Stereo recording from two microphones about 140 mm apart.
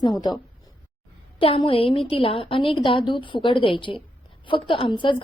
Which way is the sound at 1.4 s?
40° left (ahead or behind).